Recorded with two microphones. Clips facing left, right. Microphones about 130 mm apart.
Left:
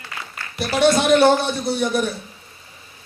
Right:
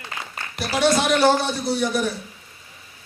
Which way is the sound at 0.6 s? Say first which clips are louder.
Left 3 dB; 25° left (ahead or behind).